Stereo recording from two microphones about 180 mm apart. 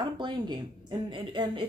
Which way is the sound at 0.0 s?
25° right (ahead or behind).